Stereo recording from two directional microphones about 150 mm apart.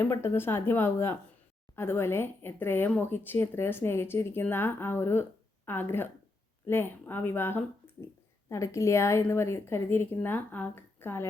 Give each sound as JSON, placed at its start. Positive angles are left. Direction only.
{"t": 0.0, "sound": "speech", "side_deg": 15}